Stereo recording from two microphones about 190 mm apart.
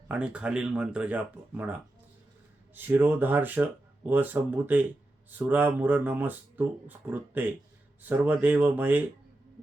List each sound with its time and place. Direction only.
0.1 s speech: 5° right (ahead or behind)